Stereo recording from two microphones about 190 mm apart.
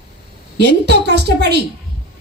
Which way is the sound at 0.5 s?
60° right (ahead or behind).